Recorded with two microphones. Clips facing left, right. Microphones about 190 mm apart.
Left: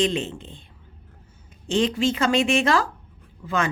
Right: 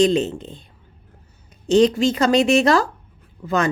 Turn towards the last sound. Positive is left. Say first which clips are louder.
# right 5 dB
turn(degrees=-40)  # may be behind; listen again after turning